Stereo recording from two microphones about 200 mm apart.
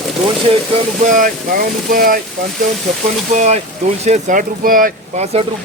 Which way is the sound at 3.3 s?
35° right (ahead or behind).